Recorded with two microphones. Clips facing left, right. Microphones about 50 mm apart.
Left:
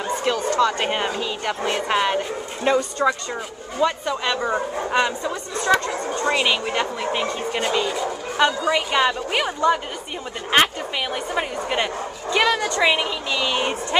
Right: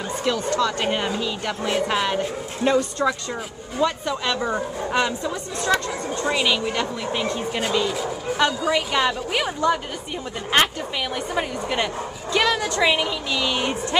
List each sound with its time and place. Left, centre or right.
0.2 s speech: centre
6.3 s speech: centre
7.9 s bow-wow: centre
8.6 s speech: centre